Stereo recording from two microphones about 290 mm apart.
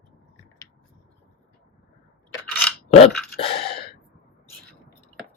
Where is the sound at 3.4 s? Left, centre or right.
Centre.